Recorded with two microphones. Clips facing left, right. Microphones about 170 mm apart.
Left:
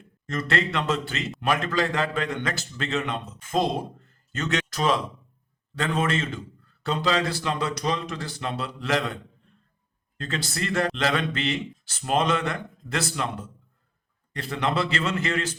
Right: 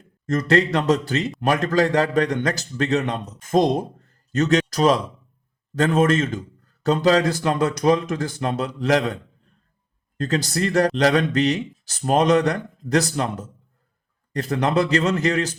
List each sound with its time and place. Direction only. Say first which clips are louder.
0.3 s a man's voice: right 8 dB; 40° right (ahead or behind)
10.2 s a man's voice: right 8 dB; 40° right (ahead or behind)